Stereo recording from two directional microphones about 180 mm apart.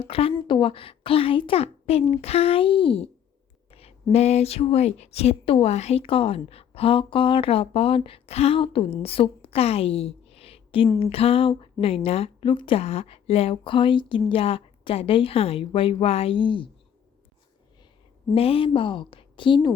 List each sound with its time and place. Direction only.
0.0 s speech: 30° left (ahead or behind)
3.7 s a sound: 35° left (ahead or behind)
4.1 s a woman's voice: 35° left (ahead or behind)
18.3 s a woman's voice: 30° left (ahead or behind)